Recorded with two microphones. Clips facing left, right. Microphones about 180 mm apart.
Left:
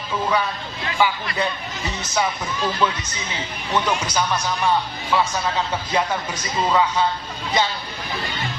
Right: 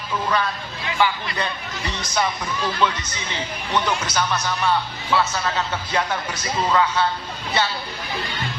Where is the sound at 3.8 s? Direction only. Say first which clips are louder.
Left 1 dB; 10° left (ahead or behind).